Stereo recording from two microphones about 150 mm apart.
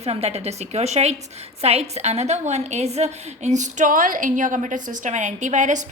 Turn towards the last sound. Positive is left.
turn(degrees=-55)  # may be behind; listen again after turning